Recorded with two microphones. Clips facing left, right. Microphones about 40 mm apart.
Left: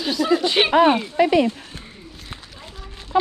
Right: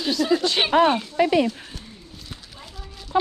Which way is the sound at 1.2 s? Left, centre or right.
Left.